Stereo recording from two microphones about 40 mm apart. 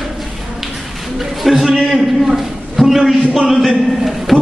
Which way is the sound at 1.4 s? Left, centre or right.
Centre.